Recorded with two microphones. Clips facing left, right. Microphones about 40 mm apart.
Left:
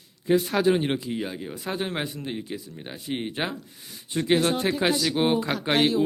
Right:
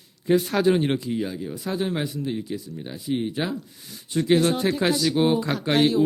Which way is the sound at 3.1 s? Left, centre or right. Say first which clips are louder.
Right 3 dB; left.